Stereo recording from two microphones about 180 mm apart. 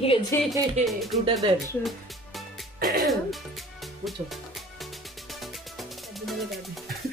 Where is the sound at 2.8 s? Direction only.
50° right (ahead or behind).